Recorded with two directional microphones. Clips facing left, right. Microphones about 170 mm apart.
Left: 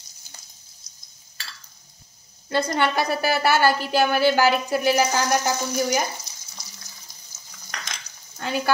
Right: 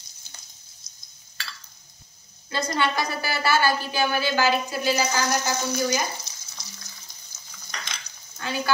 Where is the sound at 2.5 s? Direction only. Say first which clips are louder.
Left 3 dB; 60° left (ahead or behind).